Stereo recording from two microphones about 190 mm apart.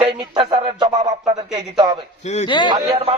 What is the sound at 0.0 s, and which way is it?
A man's voice, 25° right (ahead or behind).